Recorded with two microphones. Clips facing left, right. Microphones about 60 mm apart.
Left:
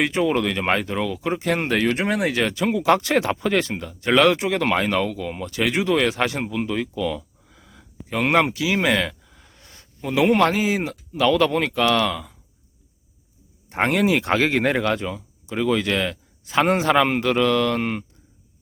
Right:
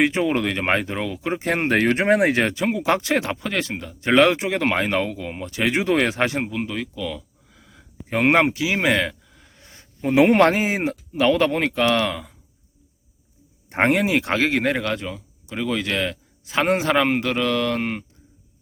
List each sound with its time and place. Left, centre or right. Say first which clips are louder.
0.0 s speech: even; right
2.0 s speech: right 5 dB; right
2.6 s speech: left 2 dB; centre
4.0 s speech: even; centre
5.8 s speech: left 1 dB; right
6.2 s speech: even; centre
6.7 s a sound: left 4 dB; centre
8.5 s speech: even; centre
9.2 s a sound: even; centre
10.0 s speech: right 3 dB; right
11.1 s speech: left 1 dB; right
13.7 s a sound: right 3 dB; right
13.9 s speech: left 1 dB; centre